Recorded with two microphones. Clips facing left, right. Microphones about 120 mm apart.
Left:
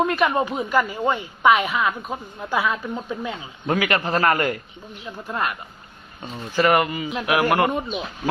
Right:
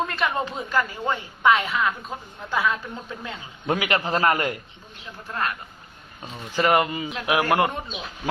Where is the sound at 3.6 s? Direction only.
15° right (ahead or behind).